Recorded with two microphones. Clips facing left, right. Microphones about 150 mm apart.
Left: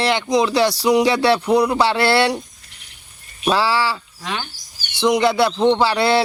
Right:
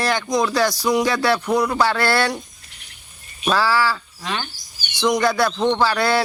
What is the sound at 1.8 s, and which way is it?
Speech, 30° left (ahead or behind).